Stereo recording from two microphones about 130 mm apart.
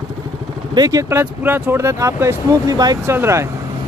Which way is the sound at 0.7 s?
30° right (ahead or behind).